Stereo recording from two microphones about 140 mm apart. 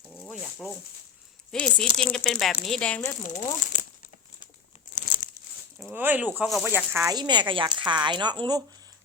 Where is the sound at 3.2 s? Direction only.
65° left (ahead or behind).